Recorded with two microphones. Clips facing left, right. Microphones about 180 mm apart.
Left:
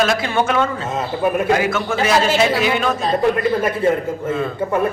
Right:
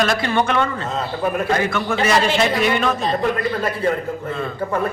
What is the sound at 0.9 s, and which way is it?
Speech, 15° left (ahead or behind).